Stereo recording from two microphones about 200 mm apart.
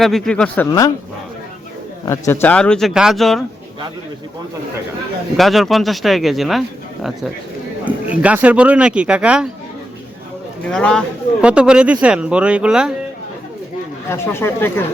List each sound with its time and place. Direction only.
0.0 s speech: 5° left (ahead or behind)
0.7 s speech: 20° left (ahead or behind)
2.0 s speech: 10° left (ahead or behind)
5.4 s speech: centre (ahead or behind)
10.7 s speech: 5° left (ahead or behind)
14.1 s speech: 10° left (ahead or behind)